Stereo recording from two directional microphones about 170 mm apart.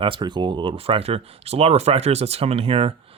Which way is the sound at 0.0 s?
30° right (ahead or behind).